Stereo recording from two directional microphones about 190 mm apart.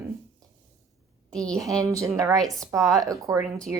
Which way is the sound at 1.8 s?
15° right (ahead or behind).